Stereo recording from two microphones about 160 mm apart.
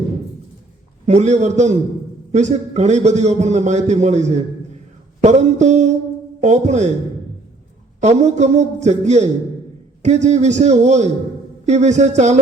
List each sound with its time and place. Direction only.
1.0 s a man's voice: 45° right (ahead or behind)
8.0 s a man's voice: 45° right (ahead or behind)